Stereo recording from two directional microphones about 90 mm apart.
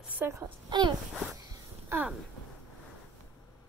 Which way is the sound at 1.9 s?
30° right (ahead or behind).